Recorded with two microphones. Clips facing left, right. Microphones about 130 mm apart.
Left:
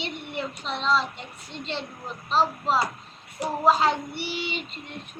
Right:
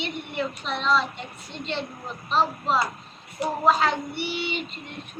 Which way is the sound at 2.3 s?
30° left (ahead or behind).